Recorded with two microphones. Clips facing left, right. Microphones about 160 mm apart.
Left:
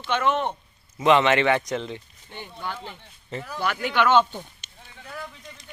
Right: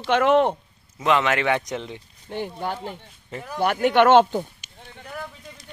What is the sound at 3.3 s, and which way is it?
Speech, 15° right (ahead or behind).